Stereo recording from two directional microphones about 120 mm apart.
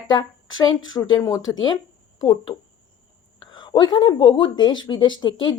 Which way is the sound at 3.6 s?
40° left (ahead or behind).